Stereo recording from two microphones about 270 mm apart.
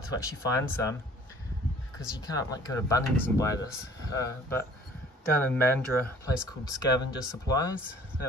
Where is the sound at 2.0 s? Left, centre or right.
Centre.